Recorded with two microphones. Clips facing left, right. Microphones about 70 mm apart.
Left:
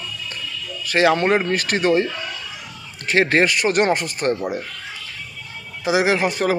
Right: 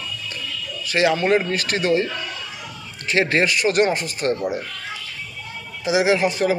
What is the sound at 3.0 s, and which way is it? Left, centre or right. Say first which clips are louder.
Speech: left 2 dB; left.